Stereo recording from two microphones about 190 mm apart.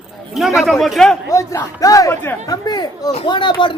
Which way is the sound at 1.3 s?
15° left (ahead or behind).